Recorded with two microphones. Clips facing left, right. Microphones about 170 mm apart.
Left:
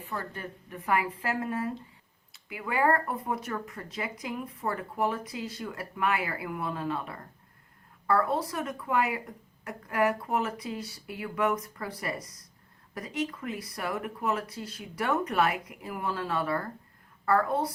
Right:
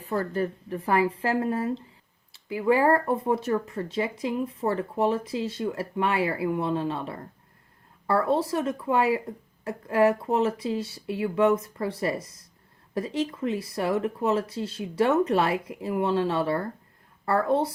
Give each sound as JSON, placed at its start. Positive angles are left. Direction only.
{"t": 0.0, "sound": "speech", "side_deg": -35}